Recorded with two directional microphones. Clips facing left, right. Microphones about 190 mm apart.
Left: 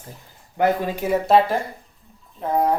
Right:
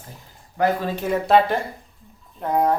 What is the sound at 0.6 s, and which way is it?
Speech, 15° left (ahead or behind).